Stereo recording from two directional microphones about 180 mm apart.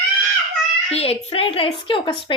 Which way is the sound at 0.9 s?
35° left (ahead or behind).